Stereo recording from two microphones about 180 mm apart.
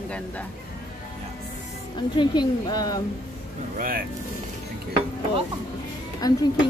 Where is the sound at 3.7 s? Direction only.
50° right (ahead or behind).